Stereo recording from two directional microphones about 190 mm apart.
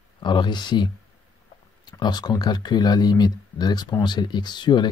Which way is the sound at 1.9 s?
20° left (ahead or behind).